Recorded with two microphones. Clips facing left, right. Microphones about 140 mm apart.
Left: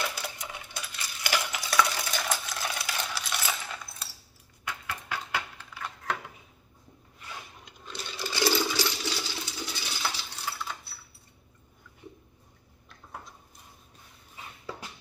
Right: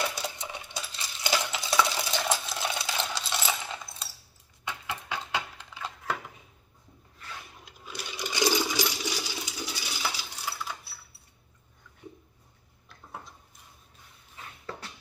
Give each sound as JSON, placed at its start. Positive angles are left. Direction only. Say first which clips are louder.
{"t": 0.2, "sound": "coin", "louder": "right 2 dB", "side_deg": -25}
{"t": 4.6, "sound": "a sound", "louder": "right 1 dB", "side_deg": -20}
{"t": 7.6, "sound": "sewing machine", "louder": "even", "side_deg": -10}